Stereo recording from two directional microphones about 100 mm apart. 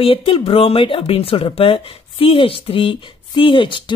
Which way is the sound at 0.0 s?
65° left (ahead or behind).